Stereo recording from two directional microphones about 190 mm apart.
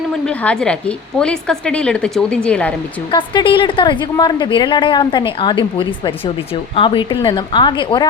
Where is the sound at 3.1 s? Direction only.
25° left (ahead or behind).